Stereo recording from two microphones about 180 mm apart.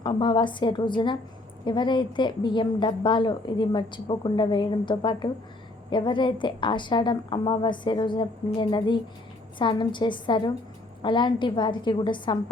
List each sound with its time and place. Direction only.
0.0 s a woman's voice: 25° left (ahead or behind)